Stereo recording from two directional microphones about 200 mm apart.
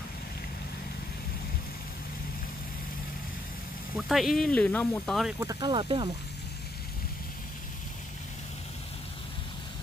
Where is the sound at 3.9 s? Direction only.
Centre (ahead or behind).